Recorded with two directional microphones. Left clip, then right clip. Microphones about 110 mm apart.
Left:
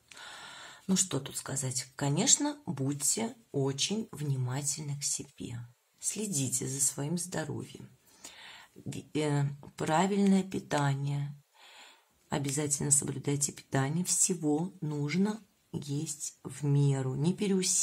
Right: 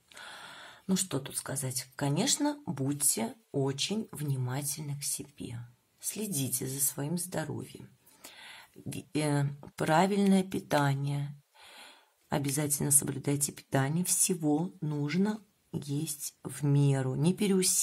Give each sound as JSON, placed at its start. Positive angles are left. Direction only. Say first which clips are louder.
{"t": 0.4, "sound": "speech", "louder": "even", "side_deg": -10}
{"t": 10.3, "sound": "a sound", "louder": "right 3 dB", "side_deg": -35}
{"t": 12.5, "sound": "speech", "louder": "even", "side_deg": -30}